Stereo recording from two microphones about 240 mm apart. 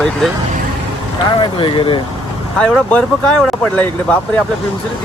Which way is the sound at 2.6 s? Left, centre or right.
Centre.